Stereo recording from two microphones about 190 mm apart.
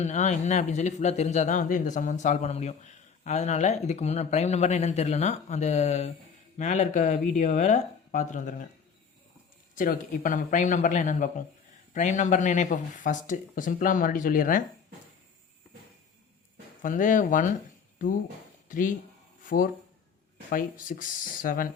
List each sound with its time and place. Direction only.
0.0 s speech: 40° left (ahead or behind)
9.7 s speech: 45° left (ahead or behind)
16.8 s speech: 45° left (ahead or behind)
18.7 s speech: 45° left (ahead or behind)
20.5 s speech: 45° left (ahead or behind)